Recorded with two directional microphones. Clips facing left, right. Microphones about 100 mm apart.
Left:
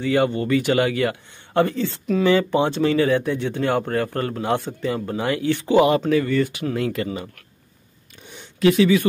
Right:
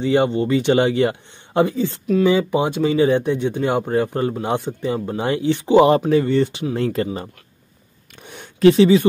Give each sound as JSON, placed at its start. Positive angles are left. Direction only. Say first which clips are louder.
{"t": 0.0, "sound": "speech", "louder": "right 3 dB", "side_deg": -20}
{"t": 8.2, "sound": "a sound", "louder": "right 4 dB", "side_deg": -60}
{"t": 8.5, "sound": "speech", "louder": "right 4 dB", "side_deg": -35}